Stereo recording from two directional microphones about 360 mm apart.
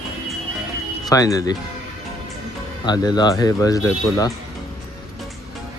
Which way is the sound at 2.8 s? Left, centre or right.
Centre.